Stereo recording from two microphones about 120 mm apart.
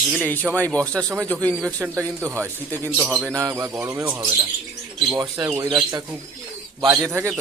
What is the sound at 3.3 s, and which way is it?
Speech, 30° right (ahead or behind).